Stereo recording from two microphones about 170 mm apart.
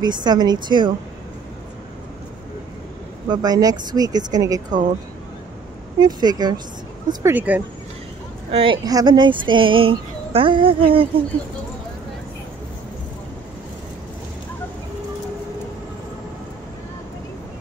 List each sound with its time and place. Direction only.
0.0 s speech: 25° right (ahead or behind)
3.3 s speech: 20° right (ahead or behind)
5.9 s speech: 25° right (ahead or behind)
7.1 s speech: 15° right (ahead or behind)
8.5 s speech: 30° right (ahead or behind)